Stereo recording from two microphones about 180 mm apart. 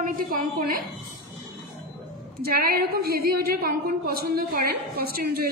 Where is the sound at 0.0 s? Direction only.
55° right (ahead or behind).